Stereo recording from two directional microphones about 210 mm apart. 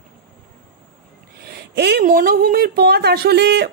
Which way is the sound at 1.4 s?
50° right (ahead or behind).